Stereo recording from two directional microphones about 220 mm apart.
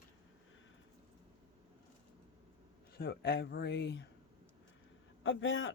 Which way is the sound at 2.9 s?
45° left (ahead or behind).